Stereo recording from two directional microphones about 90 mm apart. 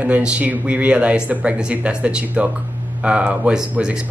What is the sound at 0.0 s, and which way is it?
Speech, 15° right (ahead or behind).